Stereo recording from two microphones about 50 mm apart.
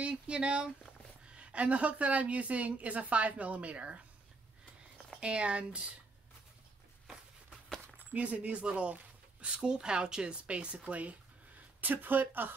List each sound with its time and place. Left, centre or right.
0.0 s a woman's voice: right
5.2 s a woman's voice: right
8.0 s a woman's voice: right
11.8 s speech: right